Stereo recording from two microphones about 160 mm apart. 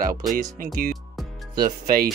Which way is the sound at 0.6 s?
60° right (ahead or behind).